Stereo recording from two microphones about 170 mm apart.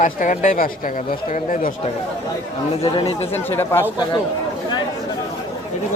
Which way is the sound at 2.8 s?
30° left (ahead or behind).